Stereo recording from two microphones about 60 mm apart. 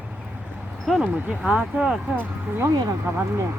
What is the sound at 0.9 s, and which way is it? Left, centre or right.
Speech, centre.